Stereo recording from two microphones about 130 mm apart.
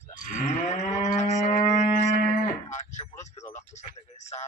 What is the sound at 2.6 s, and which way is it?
Livestock, 65° left (ahead or behind).